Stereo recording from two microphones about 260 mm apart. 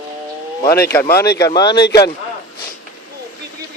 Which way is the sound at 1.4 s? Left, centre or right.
Centre.